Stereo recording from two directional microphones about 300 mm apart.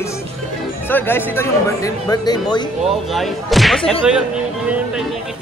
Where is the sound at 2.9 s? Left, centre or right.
Centre.